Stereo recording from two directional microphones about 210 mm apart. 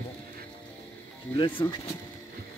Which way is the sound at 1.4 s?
25° left (ahead or behind).